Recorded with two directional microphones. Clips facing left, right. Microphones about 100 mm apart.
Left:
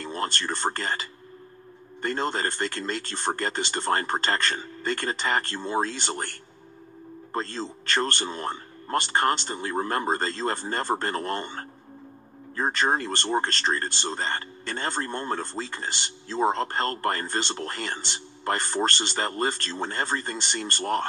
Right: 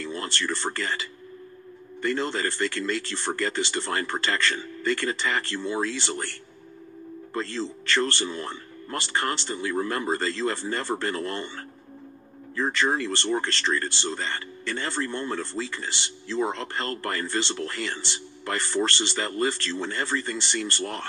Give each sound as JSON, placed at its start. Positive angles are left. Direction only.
{"t": 0.0, "sound": "speech", "side_deg": 45}
{"t": 7.3, "sound": "speech", "side_deg": 45}